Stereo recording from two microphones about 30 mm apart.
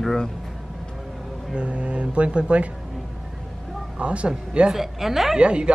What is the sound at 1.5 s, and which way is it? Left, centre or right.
Speech, right.